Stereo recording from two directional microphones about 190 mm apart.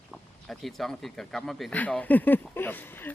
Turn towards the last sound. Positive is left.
turn(degrees=10)  # may be behind; listen again after turning